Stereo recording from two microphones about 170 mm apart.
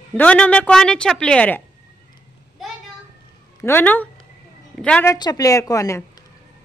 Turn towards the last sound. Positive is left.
turn(degrees=20)  # may be behind; listen again after turning